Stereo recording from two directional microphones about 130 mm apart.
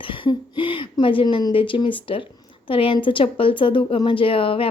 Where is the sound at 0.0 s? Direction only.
40° left (ahead or behind).